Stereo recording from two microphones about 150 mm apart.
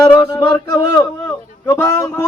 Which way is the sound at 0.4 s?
30° left (ahead or behind).